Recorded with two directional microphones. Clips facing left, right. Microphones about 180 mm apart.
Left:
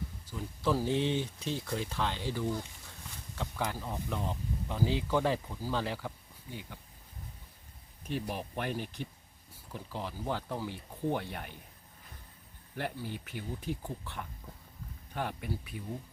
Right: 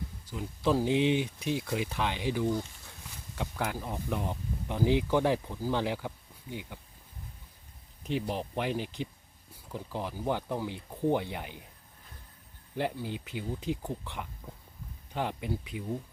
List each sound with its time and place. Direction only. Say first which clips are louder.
0.3 s speech: right 3 dB; 20° right (ahead or behind)
8.0 s speech: right 4 dB; 20° right (ahead or behind)
12.7 s speech: right 5 dB; 15° right (ahead or behind)